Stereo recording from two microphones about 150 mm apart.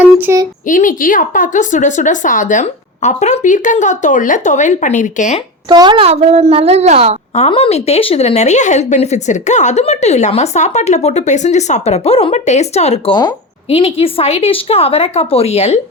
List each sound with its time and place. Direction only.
0.0 s a sound: 10° right (ahead or behind)
0.7 s a woman's voice: 60° left (ahead or behind)
5.6 s speech: 30° right (ahead or behind); by 7.2 s 45° right (ahead or behind)
7.3 s a woman's voice: 40° left (ahead or behind)